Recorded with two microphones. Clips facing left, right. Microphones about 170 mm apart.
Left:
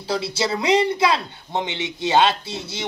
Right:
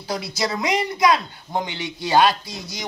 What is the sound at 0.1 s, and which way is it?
Speech, 30° left (ahead or behind).